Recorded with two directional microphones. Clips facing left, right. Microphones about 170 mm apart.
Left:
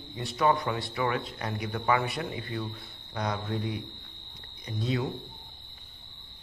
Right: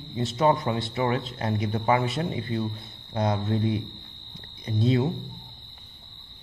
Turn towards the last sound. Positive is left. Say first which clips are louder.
# right 7 dB
turn(degrees=-30)  # may be behind; listen again after turning